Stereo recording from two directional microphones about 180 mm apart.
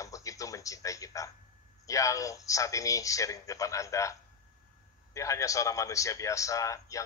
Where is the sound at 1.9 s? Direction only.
20° left (ahead or behind).